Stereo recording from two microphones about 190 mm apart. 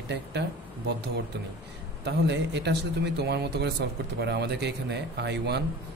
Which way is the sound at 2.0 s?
65° right (ahead or behind).